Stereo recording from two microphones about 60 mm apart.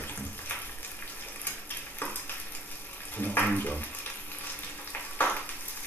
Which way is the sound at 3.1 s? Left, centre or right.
Left.